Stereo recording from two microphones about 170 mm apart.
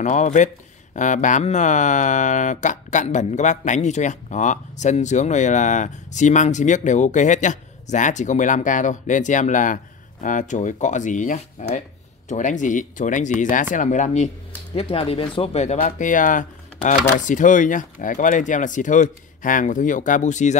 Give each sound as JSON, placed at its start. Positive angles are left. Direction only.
{"t": 0.0, "sound": "speech", "side_deg": 45}
{"t": 14.8, "sound": "speech", "side_deg": 35}